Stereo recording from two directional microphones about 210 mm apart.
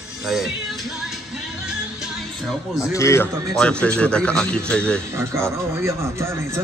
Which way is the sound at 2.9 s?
15° left (ahead or behind).